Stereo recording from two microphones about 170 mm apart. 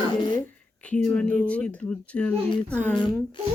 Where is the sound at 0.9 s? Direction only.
5° left (ahead or behind).